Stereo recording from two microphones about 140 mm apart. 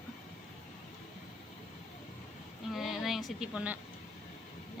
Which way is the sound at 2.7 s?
Centre (ahead or behind).